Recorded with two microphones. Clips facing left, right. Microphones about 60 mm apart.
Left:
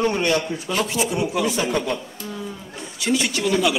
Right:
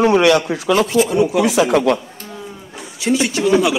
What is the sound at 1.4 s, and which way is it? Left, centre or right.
Speech, right.